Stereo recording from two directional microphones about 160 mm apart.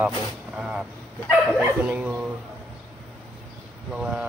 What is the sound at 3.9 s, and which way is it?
Speech, 5° right (ahead or behind).